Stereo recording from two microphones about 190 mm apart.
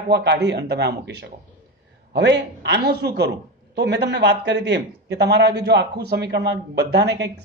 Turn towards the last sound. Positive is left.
turn(degrees=-65)  # may be behind; listen again after turning